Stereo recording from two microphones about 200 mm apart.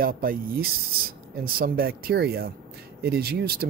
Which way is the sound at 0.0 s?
45° right (ahead or behind).